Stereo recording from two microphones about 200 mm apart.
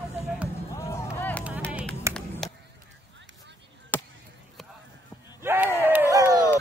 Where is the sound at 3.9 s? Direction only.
10° left (ahead or behind).